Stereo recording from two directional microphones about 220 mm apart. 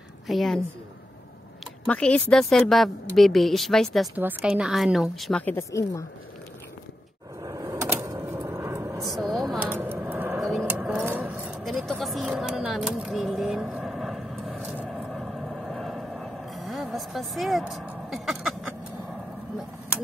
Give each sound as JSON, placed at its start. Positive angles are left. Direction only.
{"t": 0.3, "sound": "a woman's voice", "side_deg": 0}
{"t": 1.9, "sound": "a woman's voice", "side_deg": 5}
{"t": 7.4, "sound": "vehicle", "side_deg": -15}
{"t": 9.1, "sound": "a sound", "side_deg": 0}
{"t": 10.6, "sound": "vehicle", "side_deg": -5}